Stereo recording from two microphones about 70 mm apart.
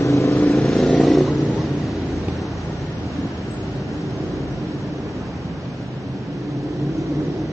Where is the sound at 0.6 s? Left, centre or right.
Centre.